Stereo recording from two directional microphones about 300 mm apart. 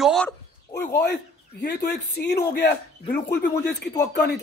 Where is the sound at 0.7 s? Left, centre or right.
Left.